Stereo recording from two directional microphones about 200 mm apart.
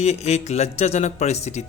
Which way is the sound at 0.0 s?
35° left (ahead or behind).